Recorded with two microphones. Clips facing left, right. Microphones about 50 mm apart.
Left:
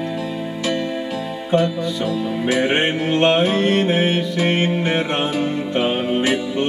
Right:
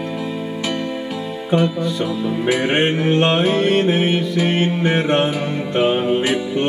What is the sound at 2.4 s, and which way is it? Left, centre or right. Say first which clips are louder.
Music: right 1 dB; right.